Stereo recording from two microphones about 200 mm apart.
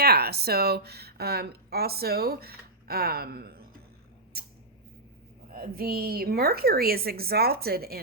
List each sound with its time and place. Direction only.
0.0 s speech: 50° right (ahead or behind)
4.3 s a sound: 50° right (ahead or behind)
5.5 s speech: 50° right (ahead or behind)